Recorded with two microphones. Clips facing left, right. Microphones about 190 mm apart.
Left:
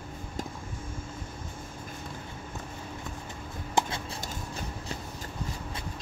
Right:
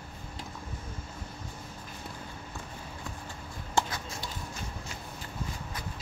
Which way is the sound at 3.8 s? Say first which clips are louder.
Left 1 dB; 15° left (ahead or behind).